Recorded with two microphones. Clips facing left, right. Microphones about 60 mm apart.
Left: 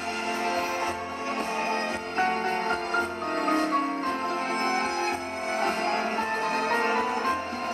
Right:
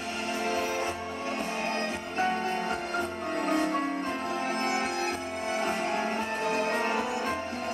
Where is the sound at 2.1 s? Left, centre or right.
Left.